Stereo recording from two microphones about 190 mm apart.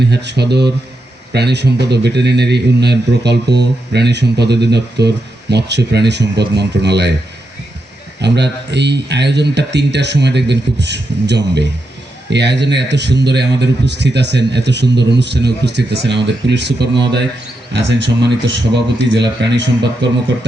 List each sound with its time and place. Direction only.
0.0 s speech: 60° right (ahead or behind)
8.2 s speech: 65° right (ahead or behind)